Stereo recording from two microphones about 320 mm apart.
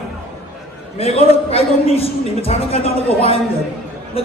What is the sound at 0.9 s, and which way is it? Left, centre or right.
A man's voice, centre.